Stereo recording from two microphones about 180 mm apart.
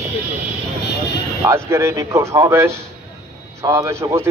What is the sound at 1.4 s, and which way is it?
A man's voice, 15° right (ahead or behind).